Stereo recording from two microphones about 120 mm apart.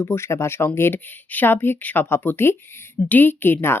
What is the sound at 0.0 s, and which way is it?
A woman's voice, 20° left (ahead or behind).